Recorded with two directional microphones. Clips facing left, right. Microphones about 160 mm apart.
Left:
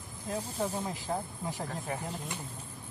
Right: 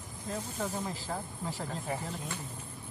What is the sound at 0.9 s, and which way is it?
Speech, 20° left (ahead or behind).